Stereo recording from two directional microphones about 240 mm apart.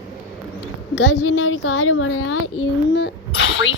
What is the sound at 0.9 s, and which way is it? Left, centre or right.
A woman's voice, left.